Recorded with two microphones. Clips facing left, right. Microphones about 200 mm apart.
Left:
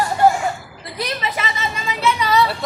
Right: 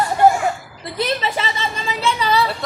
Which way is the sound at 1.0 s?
30° right (ahead or behind).